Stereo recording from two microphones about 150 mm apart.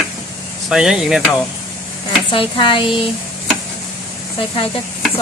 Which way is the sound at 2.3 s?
35° left (ahead or behind).